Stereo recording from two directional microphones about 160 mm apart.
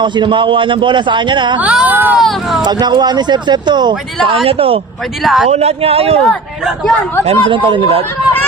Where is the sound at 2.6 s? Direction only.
25° right (ahead or behind).